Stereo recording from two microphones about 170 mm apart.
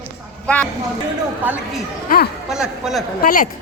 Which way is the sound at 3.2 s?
50° left (ahead or behind).